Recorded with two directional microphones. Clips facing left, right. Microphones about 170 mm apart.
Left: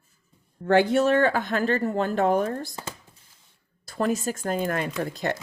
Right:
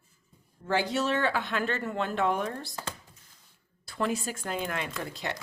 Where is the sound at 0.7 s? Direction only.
55° left (ahead or behind).